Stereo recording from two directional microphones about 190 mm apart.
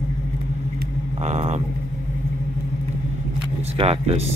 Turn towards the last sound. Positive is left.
turn(degrees=-35)  # may be behind; listen again after turning